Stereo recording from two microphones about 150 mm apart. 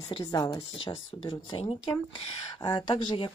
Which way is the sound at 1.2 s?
35° left (ahead or behind).